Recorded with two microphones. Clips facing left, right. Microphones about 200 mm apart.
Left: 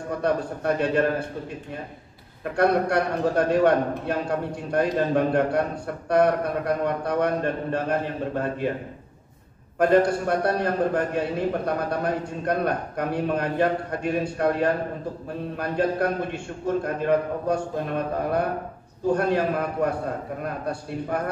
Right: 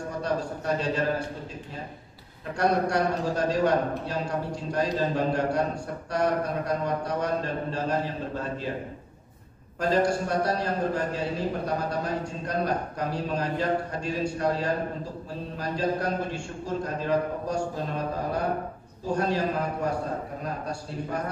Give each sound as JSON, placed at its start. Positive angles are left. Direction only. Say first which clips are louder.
{"t": 0.2, "sound": "a man's voice", "louder": "left 5 dB", "side_deg": 60}
{"t": 2.5, "sound": "a man's voice", "louder": "left 3 dB", "side_deg": 60}
{"t": 9.8, "sound": "a man's voice", "louder": "left 5 dB", "side_deg": 60}